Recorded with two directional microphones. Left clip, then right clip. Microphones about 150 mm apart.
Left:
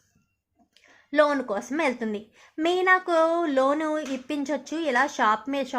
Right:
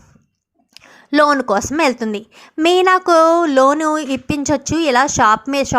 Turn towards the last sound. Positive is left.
turn(degrees=-35)  # may be behind; listen again after turning